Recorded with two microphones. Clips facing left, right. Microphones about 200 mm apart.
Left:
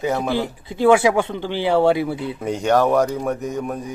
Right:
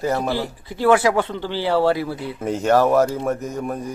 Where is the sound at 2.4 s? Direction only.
Centre (ahead or behind).